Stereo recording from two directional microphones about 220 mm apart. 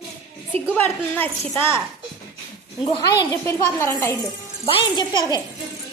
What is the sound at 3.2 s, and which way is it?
A woman's voice, 10° left (ahead or behind).